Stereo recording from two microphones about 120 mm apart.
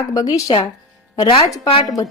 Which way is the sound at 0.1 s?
30° left (ahead or behind).